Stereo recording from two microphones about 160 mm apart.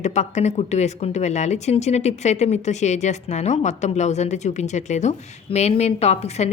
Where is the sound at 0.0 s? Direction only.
45° left (ahead or behind).